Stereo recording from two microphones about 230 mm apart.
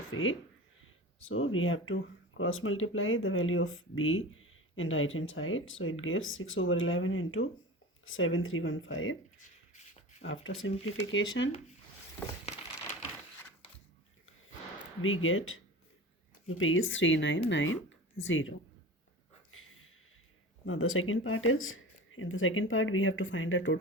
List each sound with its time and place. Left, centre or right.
0.1 s speech: left
9.4 s beatboxing: left
10.2 s speech: left
15.0 s speech: left
17.8 s a sound: left
20.7 s speech: left